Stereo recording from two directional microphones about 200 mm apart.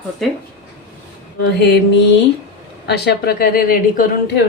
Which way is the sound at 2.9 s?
50° left (ahead or behind).